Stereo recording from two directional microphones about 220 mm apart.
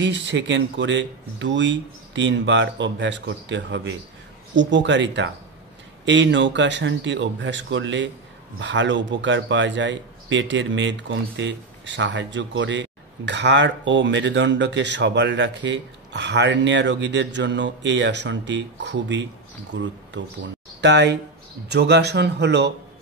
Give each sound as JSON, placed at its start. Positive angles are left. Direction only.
{"t": 0.0, "sound": "a man's voice", "side_deg": -55}